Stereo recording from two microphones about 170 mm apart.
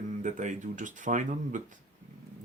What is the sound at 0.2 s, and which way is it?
Speech, 45° right (ahead or behind).